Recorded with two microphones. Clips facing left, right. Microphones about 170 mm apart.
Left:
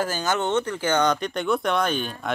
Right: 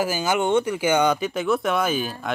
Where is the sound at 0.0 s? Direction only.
10° right (ahead or behind).